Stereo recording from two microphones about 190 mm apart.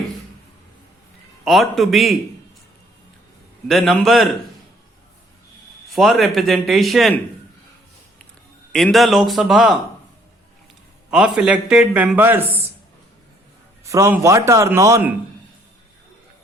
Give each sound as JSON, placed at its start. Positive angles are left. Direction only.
{"t": 1.5, "sound": "a man's voice", "side_deg": 0}
{"t": 3.7, "sound": "a man's voice", "side_deg": 0}
{"t": 5.9, "sound": "a man's voice", "side_deg": 0}
{"t": 8.7, "sound": "a man's voice", "side_deg": 0}
{"t": 11.1, "sound": "a man's voice", "side_deg": -5}
{"t": 13.8, "sound": "a man's voice", "side_deg": -15}